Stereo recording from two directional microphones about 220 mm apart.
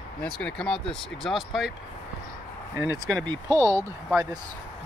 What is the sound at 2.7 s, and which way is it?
Speech, 15° right (ahead or behind).